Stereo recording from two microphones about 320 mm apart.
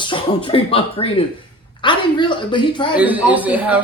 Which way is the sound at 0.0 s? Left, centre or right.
Centre.